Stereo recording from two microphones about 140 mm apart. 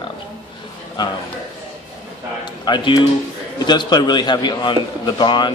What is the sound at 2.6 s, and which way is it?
A man's voice, 30° left (ahead or behind).